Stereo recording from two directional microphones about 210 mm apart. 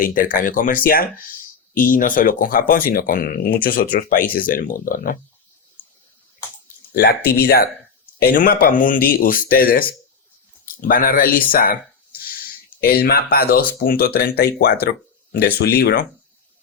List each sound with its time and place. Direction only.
0.0 s speech: 40° left (ahead or behind)
6.9 s speech: 50° left (ahead or behind)
12.8 s speech: 45° left (ahead or behind)